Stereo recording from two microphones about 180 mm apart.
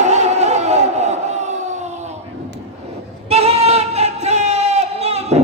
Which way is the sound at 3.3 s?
35° right (ahead or behind).